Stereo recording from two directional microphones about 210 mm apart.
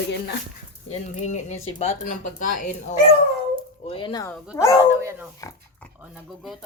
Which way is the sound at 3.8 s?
25° left (ahead or behind).